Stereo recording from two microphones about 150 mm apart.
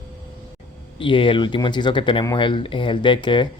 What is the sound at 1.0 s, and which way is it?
Speech, 35° left (ahead or behind).